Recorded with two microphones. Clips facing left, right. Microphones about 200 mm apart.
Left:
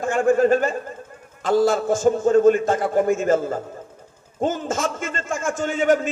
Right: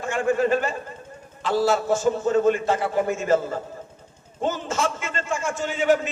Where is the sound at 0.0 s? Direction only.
45° left (ahead or behind).